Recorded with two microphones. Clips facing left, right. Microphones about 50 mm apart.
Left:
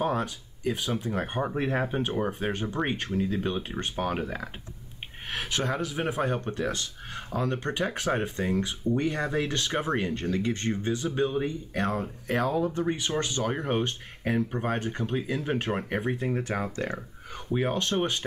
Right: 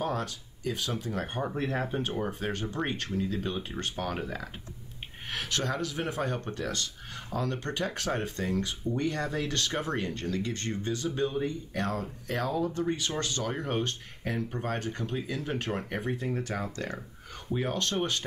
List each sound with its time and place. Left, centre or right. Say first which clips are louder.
0.0 s speech: left 4 dB; centre